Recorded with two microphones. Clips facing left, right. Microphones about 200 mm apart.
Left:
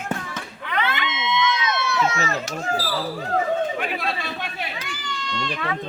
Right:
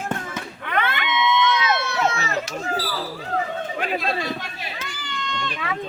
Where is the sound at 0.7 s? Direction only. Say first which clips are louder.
Right 2 dB; 55° right (ahead or behind).